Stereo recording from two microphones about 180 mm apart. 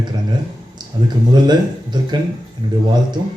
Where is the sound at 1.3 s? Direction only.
25° right (ahead or behind).